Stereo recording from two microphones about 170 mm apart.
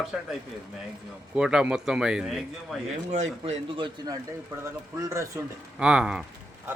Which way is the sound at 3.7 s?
25° right (ahead or behind).